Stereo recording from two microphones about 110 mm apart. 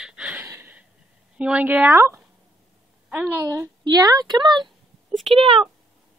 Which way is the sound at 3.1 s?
15° right (ahead or behind).